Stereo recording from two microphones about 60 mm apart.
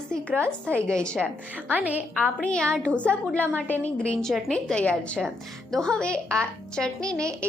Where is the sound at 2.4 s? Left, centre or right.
Centre.